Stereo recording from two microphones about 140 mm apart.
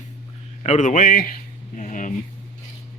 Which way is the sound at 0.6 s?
55° left (ahead or behind).